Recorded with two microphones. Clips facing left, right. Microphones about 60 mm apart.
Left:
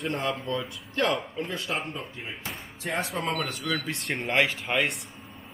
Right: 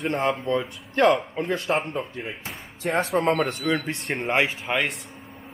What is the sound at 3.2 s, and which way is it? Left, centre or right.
Speech, right.